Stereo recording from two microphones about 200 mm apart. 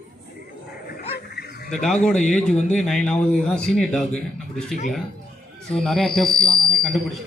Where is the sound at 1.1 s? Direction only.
55° left (ahead or behind).